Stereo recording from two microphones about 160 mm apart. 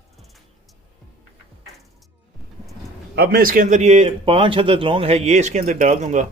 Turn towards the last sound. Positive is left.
turn(degrees=-50)  # may be behind; listen again after turning